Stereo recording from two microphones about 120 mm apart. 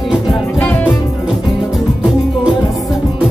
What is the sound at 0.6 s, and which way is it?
Music, 10° left (ahead or behind).